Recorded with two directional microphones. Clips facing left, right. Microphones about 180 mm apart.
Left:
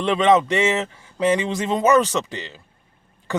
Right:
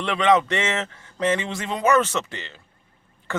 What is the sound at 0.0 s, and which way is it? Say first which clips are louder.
Speech: left 3 dB; 20° left (ahead or behind).